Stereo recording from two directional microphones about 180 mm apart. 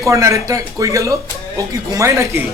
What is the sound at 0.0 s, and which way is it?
Speech, 15° right (ahead or behind).